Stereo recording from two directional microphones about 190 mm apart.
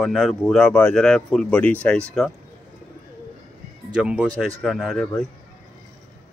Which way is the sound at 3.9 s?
5° right (ahead or behind).